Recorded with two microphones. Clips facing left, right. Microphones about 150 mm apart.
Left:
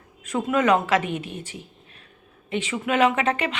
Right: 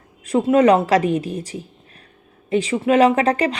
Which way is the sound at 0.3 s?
35° right (ahead or behind).